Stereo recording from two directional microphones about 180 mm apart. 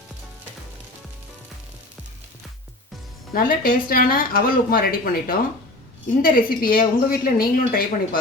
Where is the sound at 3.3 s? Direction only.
55° left (ahead or behind).